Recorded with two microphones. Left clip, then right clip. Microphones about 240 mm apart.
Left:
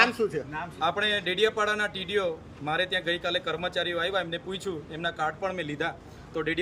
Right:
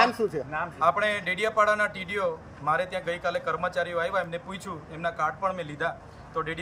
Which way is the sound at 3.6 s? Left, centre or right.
Centre.